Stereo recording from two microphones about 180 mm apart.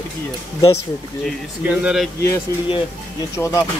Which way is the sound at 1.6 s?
5° right (ahead or behind).